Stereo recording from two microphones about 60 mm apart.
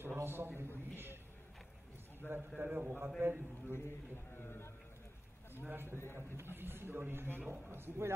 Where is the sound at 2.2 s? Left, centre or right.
Right.